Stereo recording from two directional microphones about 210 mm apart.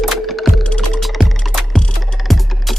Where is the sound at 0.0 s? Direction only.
Centre (ahead or behind).